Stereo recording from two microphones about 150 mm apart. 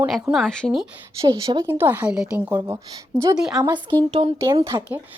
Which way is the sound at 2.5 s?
20° right (ahead or behind).